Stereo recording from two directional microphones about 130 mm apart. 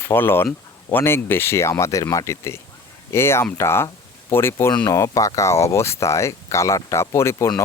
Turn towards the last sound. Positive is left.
turn(degrees=20)  # may be behind; listen again after turning